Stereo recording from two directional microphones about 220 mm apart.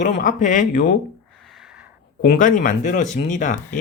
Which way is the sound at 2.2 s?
35° left (ahead or behind).